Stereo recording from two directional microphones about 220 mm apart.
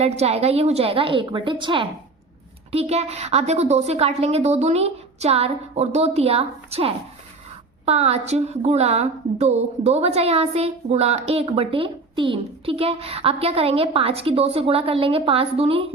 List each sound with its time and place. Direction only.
0.0 s a woman's voice: 30° right (ahead or behind)